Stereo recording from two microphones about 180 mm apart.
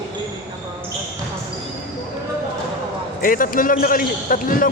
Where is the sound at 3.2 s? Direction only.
50° left (ahead or behind).